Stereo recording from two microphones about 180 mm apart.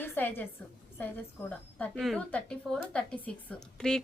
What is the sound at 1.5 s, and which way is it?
Speech, 5° left (ahead or behind).